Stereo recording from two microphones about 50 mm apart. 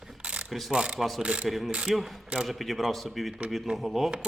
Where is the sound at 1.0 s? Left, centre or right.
Centre.